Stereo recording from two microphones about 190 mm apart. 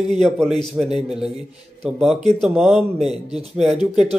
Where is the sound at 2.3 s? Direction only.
Centre (ahead or behind).